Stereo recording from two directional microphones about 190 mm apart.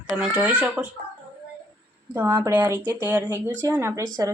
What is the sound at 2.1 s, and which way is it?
Speech, 10° right (ahead or behind).